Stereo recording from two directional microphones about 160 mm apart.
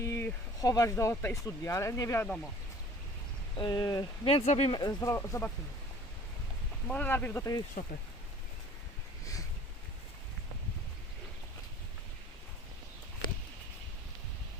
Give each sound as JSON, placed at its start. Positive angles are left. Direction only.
{"t": 0.0, "sound": "speech", "side_deg": 15}
{"t": 3.6, "sound": "speech", "side_deg": 25}
{"t": 4.3, "sound": "speech", "side_deg": 40}
{"t": 4.8, "sound": "speech", "side_deg": 25}
{"t": 6.8, "sound": "speech", "side_deg": 10}